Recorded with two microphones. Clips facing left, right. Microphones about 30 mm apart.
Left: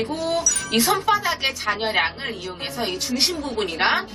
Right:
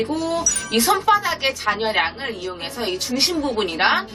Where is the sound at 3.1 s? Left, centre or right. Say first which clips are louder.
Right 3 dB; centre.